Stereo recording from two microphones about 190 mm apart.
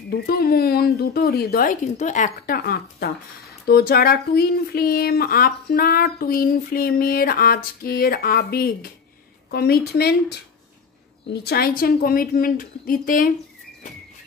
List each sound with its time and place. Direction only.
0.1 s a woman's voice: 55° left (ahead or behind)
11.2 s speech: 55° left (ahead or behind)